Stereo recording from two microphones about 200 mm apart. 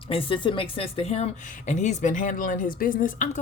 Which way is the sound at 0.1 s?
25° left (ahead or behind).